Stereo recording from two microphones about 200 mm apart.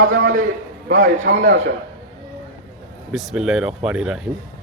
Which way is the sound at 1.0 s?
60° right (ahead or behind).